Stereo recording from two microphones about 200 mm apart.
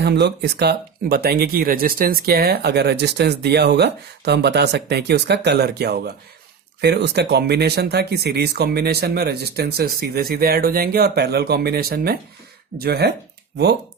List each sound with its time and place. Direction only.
0.0 s speech: 55° right (ahead or behind)